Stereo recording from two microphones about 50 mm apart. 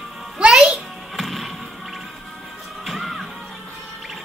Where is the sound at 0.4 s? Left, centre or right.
Centre.